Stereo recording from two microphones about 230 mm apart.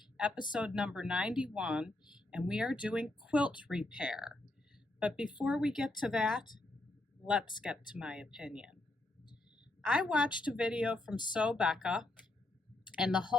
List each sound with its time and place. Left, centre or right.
0.0 s a sound: centre
0.5 s a woman's voice: centre
7.5 s speech: centre
7.9 s a woman's voice: centre
9.8 s a woman's voice: centre